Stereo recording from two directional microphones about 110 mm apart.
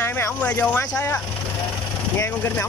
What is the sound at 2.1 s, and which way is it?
Speech, 20° left (ahead or behind).